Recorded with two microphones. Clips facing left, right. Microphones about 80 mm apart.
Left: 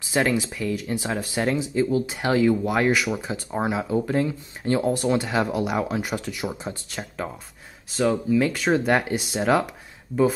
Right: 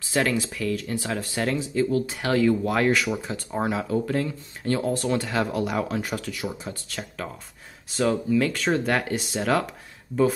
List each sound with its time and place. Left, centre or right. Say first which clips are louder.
0.1 s speech: left 2 dB; centre
7.9 s speech: left 1 dB; centre